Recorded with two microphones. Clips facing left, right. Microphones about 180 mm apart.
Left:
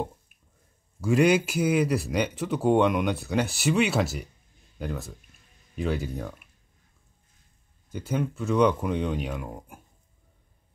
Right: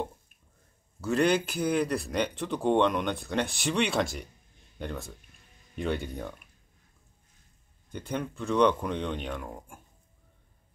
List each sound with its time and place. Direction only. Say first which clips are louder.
1.0 s speech: left 4 dB; 10° left (ahead or behind)
7.9 s speech: left 4 dB; 5° left (ahead or behind)